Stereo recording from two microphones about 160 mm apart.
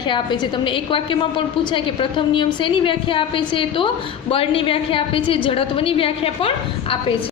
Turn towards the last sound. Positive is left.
turn(degrees=35)  # may be behind; listen again after turning